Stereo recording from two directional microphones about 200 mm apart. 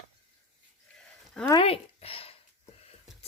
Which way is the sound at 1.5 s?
25° left (ahead or behind).